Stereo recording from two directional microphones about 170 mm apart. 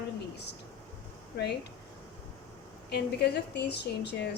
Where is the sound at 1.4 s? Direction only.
70° left (ahead or behind).